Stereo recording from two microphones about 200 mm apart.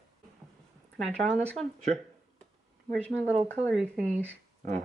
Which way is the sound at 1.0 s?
Centre (ahead or behind).